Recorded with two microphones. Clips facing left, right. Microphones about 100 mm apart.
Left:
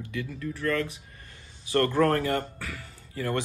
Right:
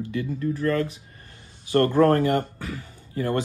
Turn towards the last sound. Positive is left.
turn(degrees=-30)  # may be behind; listen again after turning